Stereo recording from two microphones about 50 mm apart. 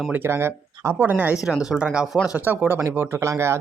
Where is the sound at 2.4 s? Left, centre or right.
Right.